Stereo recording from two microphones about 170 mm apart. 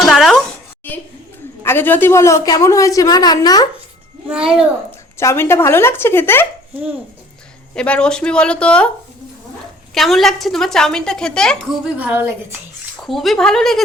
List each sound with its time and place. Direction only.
0.1 s a sound: centre (ahead or behind)
1.6 s a woman's voice: 10° left (ahead or behind)
4.3 s a woman's voice: 5° right (ahead or behind)
5.1 s speech: 15° left (ahead or behind)
7.8 s a woman's voice: 5° left (ahead or behind)
9.9 s a woman's voice: centre (ahead or behind)
11.9 s a woman's voice: 10° right (ahead or behind)
13.0 s a woman's voice: centre (ahead or behind)